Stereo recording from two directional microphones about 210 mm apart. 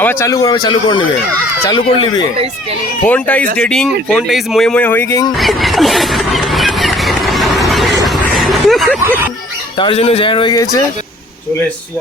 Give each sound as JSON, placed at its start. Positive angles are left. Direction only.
{"t": 0.0, "sound": "speech", "side_deg": 10}
{"t": 3.0, "sound": "speech", "side_deg": 5}
{"t": 5.4, "sound": "a sound", "side_deg": 0}
{"t": 9.7, "sound": "speech", "side_deg": 25}